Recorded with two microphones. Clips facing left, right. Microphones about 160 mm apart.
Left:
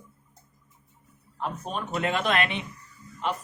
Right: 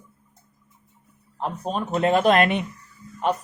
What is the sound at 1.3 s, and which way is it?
A man's voice, 35° right (ahead or behind).